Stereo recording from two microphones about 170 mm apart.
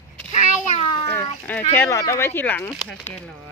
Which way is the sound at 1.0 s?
15° left (ahead or behind).